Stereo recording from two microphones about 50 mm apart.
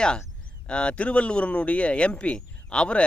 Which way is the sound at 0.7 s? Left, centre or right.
Left.